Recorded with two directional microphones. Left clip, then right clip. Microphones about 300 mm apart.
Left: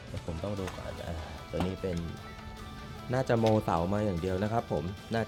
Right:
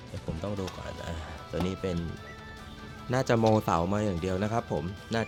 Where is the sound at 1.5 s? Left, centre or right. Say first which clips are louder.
Right 2 dB; centre.